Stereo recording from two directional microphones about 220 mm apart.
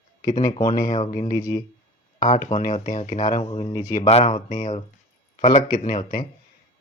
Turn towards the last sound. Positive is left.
turn(degrees=35)  # may be behind; listen again after turning